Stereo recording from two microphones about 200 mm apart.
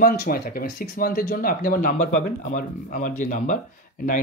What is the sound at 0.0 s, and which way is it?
Speech, 50° left (ahead or behind).